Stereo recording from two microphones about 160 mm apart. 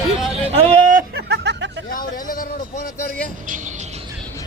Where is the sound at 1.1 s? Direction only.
90° right.